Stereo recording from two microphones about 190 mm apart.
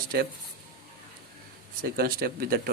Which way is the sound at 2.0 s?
55° right (ahead or behind).